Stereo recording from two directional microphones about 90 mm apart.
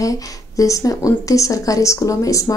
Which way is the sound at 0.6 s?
40° left (ahead or behind).